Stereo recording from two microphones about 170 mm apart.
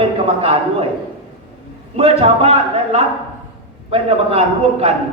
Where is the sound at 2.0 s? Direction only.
35° right (ahead or behind).